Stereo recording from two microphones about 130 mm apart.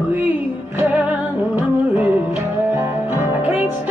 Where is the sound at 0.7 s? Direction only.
10° right (ahead or behind).